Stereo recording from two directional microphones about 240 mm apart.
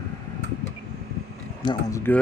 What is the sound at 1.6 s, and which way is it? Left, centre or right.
Speech, centre.